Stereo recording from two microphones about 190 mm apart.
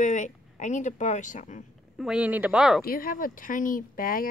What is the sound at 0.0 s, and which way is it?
Speech, 40° left (ahead or behind).